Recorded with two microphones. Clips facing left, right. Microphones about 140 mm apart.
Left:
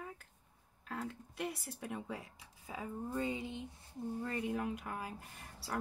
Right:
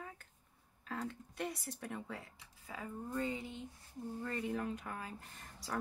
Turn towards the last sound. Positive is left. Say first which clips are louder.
# even
turn(degrees=10)  # may be behind; listen again after turning